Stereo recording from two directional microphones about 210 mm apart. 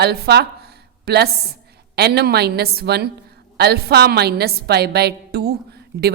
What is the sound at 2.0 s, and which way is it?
A woman's voice, 50° right (ahead or behind).